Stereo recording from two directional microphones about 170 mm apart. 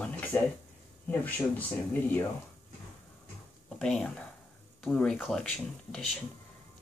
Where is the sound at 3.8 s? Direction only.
5° left (ahead or behind).